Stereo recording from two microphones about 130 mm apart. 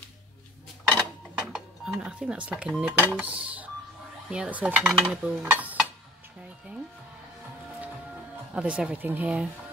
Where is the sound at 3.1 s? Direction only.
10° right (ahead or behind).